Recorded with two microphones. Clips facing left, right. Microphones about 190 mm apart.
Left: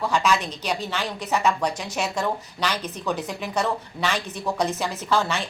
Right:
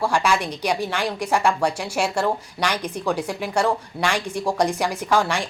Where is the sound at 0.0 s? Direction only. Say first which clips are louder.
Right 2 dB; 10° right (ahead or behind).